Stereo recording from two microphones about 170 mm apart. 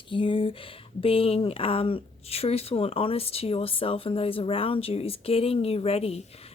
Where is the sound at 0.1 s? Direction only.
30° left (ahead or behind).